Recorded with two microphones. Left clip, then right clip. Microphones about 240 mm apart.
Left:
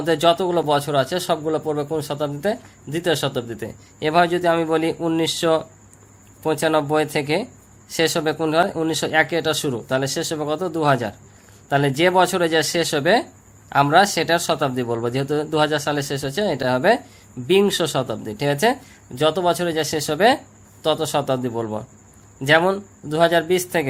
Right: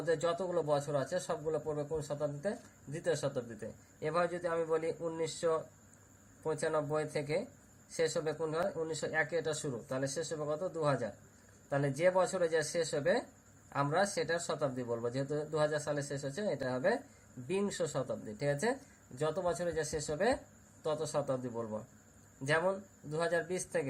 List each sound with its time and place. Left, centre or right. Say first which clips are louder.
0.0 s a man's voice: left 16 dB; left